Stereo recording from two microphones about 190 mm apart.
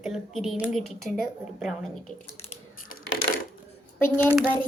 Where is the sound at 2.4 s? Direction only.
35° left (ahead or behind).